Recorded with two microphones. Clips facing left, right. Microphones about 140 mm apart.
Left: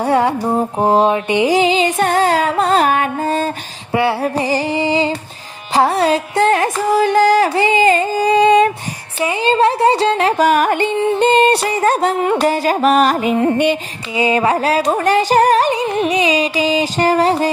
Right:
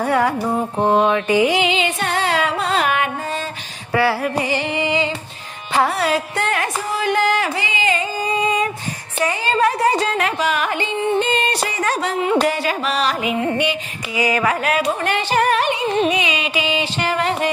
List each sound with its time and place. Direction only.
0.0 s music: 30° left (ahead or behind)
3.9 s music: 25° left (ahead or behind); by 8.1 s 45° left (ahead or behind)
8.1 s music: 75° left (ahead or behind)
9.1 s a sound: 15° left (ahead or behind)
9.4 s a sound: 25° left (ahead or behind)
10.3 s yodeling: 45° left (ahead or behind)
11.9 s music: 50° left (ahead or behind)
14.2 s music: 30° left (ahead or behind)